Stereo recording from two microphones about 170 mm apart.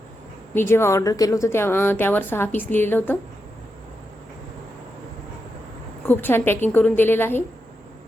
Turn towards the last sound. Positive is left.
turn(degrees=10)  # may be behind; listen again after turning